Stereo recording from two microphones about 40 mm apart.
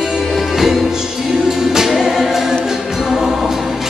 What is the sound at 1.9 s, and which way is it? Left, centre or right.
Music, centre.